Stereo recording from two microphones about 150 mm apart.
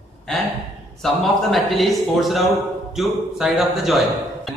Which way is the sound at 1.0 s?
Centre (ahead or behind).